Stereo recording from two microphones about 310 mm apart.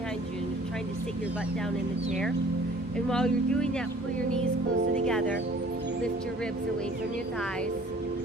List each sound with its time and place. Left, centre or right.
3.1 s speech: centre